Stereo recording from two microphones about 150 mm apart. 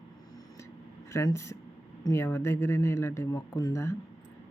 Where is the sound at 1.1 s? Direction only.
20° left (ahead or behind).